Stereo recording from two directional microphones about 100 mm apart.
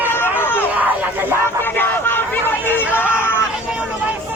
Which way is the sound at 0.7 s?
15° right (ahead or behind).